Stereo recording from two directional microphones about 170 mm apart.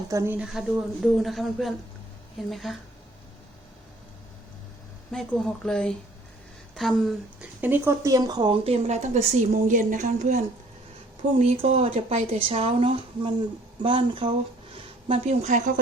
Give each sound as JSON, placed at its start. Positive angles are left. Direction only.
{"t": 0.1, "sound": "speech", "side_deg": -15}
{"t": 0.3, "sound": "speech", "side_deg": -5}
{"t": 5.6, "sound": "speech", "side_deg": 5}
{"t": 7.6, "sound": "speech", "side_deg": -15}
{"t": 8.6, "sound": "a woman's voice", "side_deg": -40}